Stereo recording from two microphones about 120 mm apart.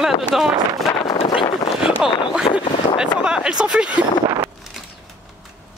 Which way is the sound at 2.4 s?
50° left (ahead or behind).